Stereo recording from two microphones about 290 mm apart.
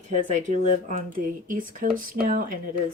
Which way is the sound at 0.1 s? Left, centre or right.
Right.